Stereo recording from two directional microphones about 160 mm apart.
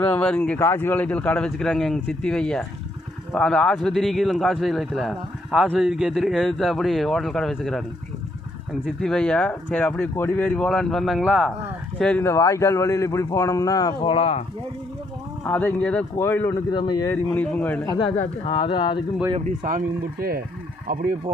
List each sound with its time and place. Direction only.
0.0 s a man's voice: 10° left (ahead or behind)
12.2 s a man's voice: 20° left (ahead or behind); by 14.4 s 40° left (ahead or behind)
15.4 s speech: 10° left (ahead or behind)
16.7 s a man's voice: 25° left (ahead or behind)
17.3 s speech: 10° left (ahead or behind)
17.8 s a man's voice: 25° left (ahead or behind)
19.5 s speech: 55° right (ahead or behind)